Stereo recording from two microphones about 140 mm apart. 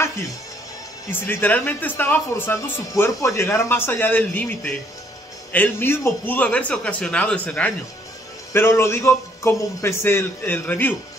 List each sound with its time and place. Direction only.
1.2 s speech: 15° left (ahead or behind)